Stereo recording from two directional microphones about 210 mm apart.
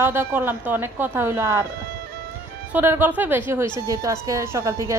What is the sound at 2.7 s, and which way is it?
A woman's voice, 10° right (ahead or behind).